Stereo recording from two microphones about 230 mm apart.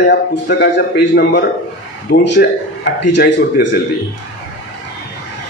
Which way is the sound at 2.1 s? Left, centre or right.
Left.